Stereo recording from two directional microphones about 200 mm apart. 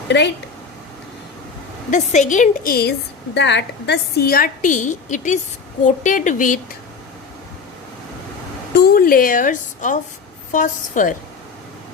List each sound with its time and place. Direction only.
1.9 s a woman's voice: 40° left (ahead or behind)
3.3 s a woman's voice: 60° left (ahead or behind); by 6.6 s 40° left (ahead or behind)
8.7 s a woman's voice: 50° left (ahead or behind)